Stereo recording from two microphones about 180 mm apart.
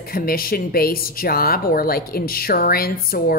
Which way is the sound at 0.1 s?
55° left (ahead or behind).